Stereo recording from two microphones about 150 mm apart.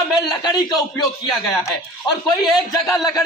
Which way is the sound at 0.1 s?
25° left (ahead or behind).